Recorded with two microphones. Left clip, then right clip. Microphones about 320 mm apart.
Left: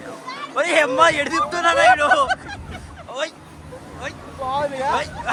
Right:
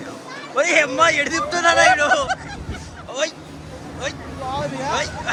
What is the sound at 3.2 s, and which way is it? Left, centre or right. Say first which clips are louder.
Speech: right 4 dB; centre.